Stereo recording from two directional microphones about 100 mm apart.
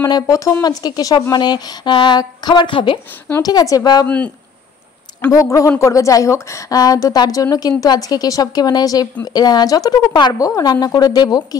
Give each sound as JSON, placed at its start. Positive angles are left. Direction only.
{"t": 0.1, "sound": "a woman's voice", "side_deg": 35}
{"t": 3.4, "sound": "a woman's voice", "side_deg": 40}
{"t": 5.3, "sound": "a woman's voice", "side_deg": 30}